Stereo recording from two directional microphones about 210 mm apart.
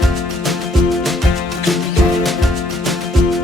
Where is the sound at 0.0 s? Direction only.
Centre (ahead or behind).